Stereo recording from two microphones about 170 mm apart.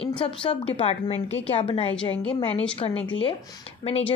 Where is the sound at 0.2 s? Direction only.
30° left (ahead or behind).